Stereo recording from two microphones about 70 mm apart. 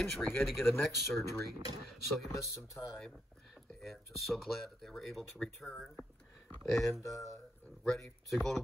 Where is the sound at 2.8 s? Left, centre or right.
Left.